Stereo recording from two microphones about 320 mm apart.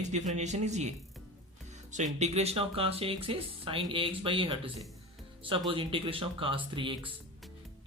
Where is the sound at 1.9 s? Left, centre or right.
Right.